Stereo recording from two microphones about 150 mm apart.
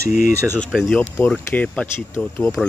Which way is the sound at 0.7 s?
Centre (ahead or behind).